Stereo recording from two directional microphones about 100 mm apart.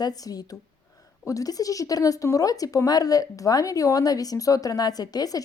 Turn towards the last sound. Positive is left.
turn(degrees=40)  # may be behind; listen again after turning